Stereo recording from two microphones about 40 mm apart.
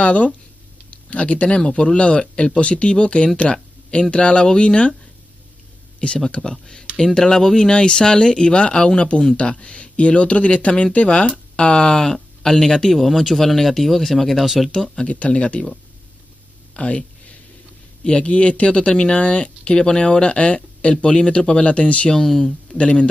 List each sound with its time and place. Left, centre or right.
0.0 s speech: left
3.3 s a sound: left
4.1 s speech: left
5.9 s speech: left
12.9 s speech: centre
14.4 s speech: centre
14.7 s speech: centre
15.0 s speech: left
16.7 s a sound: left
18.0 s speech: left
22.1 s speech: centre
22.8 s speech: left